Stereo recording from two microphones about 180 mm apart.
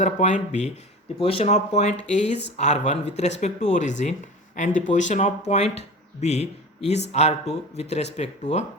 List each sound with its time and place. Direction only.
0.0 s speech: 40° left (ahead or behind)